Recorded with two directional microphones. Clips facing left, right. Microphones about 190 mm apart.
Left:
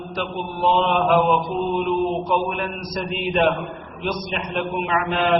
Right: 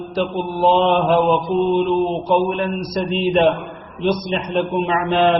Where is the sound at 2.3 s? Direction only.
30° right (ahead or behind).